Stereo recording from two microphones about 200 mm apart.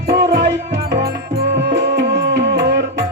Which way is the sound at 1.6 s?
60° right (ahead or behind).